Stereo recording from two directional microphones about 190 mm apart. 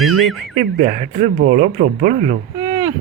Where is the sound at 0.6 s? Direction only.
40° right (ahead or behind).